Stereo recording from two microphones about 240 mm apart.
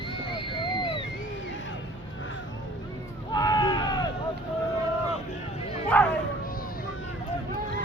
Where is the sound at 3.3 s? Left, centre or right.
Centre.